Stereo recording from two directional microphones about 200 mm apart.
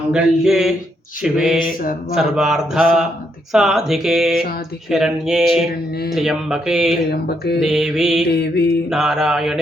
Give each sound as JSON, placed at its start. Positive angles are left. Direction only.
{"t": 0.1, "sound": "speech", "side_deg": -5}
{"t": 1.8, "sound": "mantra", "side_deg": 45}
{"t": 2.1, "sound": "speech", "side_deg": 0}
{"t": 7.1, "sound": "mantra", "side_deg": 55}
{"t": 7.6, "sound": "speech", "side_deg": 0}
{"t": 8.3, "sound": "mantra", "side_deg": 55}
{"t": 8.9, "sound": "speech", "side_deg": 0}